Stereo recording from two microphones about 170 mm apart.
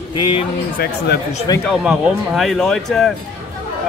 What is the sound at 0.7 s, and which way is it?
Speech, 70° left (ahead or behind).